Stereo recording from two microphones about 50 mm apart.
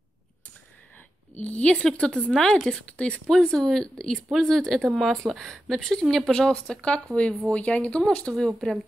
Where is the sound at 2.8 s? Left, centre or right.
Left.